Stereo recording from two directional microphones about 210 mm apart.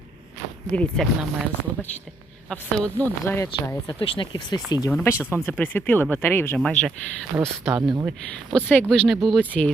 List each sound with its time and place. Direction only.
0.7 s speech: 5° left (ahead or behind)
4.0 s speech: 25° left (ahead or behind)
4.9 s speech: 10° left (ahead or behind)
8.5 s speech: 10° left (ahead or behind)